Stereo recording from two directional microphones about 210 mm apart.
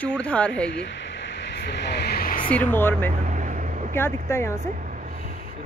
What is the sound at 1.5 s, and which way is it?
Vehicle, 55° left (ahead or behind).